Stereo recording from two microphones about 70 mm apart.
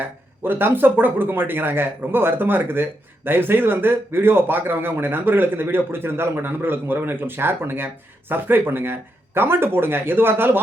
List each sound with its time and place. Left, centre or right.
0.4 s speech: right